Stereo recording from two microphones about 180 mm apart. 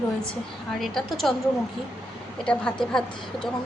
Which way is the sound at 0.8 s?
Centre (ahead or behind).